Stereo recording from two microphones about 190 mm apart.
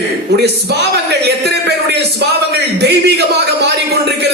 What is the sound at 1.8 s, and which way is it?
A man's voice, 60° right (ahead or behind).